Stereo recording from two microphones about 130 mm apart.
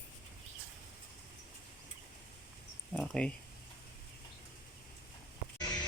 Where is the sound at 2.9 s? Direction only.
5° left (ahead or behind).